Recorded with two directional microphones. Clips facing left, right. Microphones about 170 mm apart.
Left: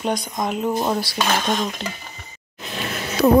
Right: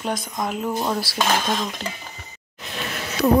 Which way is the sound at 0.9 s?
Centre (ahead or behind).